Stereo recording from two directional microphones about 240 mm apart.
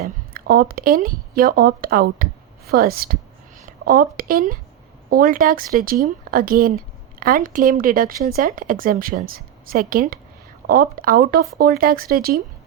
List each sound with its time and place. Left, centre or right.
0.0 s speech: right